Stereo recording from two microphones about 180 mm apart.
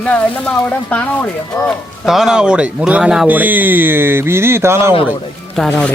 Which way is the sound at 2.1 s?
Centre (ahead or behind).